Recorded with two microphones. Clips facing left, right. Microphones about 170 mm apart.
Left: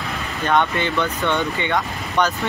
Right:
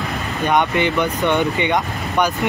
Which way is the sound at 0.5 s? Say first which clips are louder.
Right 2 dB; 15° right (ahead or behind).